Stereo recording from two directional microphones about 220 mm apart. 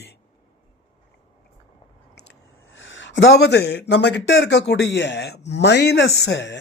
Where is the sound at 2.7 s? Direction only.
60° left (ahead or behind).